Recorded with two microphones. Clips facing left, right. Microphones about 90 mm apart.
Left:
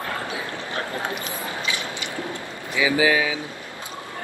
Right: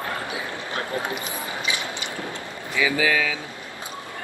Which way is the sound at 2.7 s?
20° left (ahead or behind).